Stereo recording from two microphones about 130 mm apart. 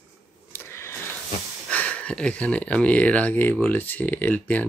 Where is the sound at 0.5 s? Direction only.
20° left (ahead or behind).